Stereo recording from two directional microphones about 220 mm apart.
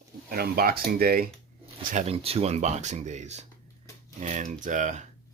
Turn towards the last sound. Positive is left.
turn(degrees=-35)  # may be behind; listen again after turning